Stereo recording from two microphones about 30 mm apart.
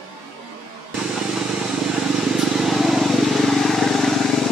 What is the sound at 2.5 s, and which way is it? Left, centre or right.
Vehicle, centre.